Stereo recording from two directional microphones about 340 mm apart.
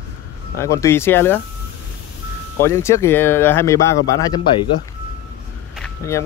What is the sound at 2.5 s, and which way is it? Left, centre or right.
A man's voice, centre.